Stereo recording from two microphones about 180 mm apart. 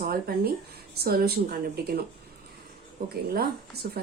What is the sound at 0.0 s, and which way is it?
A woman's voice, 55° right (ahead or behind).